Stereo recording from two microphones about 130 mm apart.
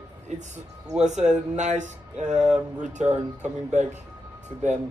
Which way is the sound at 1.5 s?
65° right (ahead or behind).